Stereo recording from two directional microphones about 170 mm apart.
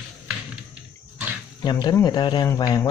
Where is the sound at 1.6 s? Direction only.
25° left (ahead or behind).